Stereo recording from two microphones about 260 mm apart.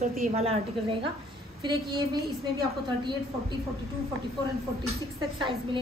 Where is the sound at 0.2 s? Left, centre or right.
Right.